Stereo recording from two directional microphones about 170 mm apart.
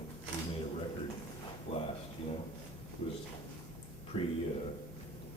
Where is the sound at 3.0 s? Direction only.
35° left (ahead or behind).